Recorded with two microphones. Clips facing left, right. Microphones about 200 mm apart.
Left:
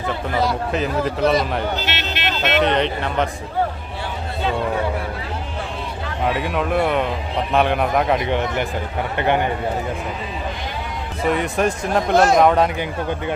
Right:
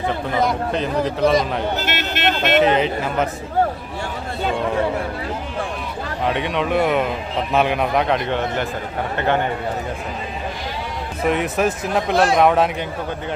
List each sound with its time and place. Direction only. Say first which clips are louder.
0.7 s speech: even; centre (ahead or behind)
1.8 s speech: right 3 dB; 50° right (ahead or behind)
2.6 s speech: right 2 dB; 5° right (ahead or behind)
6.2 s speech: even; 5° left (ahead or behind)
8.3 s speech: left 1 dB; 15° left (ahead or behind)
11.2 s speech: even; centre (ahead or behind)